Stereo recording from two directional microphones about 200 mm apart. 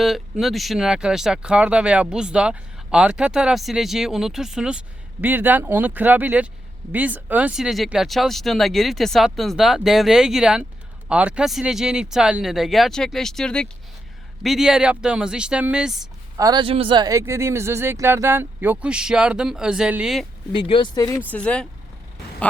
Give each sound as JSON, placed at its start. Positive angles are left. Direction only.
{"t": 0.0, "sound": "speech", "side_deg": 0}
{"t": 16.4, "sound": "speech", "side_deg": -20}
{"t": 20.5, "sound": "speech", "side_deg": 25}
{"t": 21.2, "sound": "speech", "side_deg": 5}